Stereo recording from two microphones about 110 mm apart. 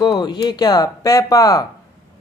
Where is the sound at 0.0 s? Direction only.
40° left (ahead or behind).